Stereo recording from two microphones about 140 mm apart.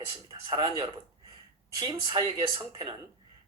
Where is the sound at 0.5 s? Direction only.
40° right (ahead or behind).